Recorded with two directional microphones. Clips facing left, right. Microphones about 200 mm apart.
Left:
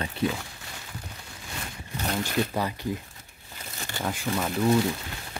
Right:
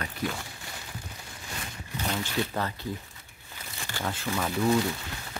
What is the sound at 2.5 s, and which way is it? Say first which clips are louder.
Speech: left 3 dB; 15° left (ahead or behind).